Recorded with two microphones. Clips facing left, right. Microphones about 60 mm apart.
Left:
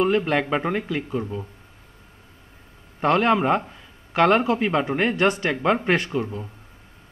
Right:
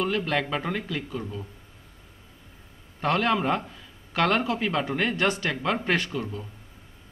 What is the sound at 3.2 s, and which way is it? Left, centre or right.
A man's voice, left.